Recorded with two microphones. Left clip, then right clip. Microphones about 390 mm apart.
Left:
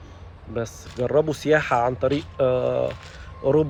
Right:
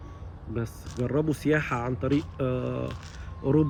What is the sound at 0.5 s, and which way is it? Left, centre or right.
Speech, centre.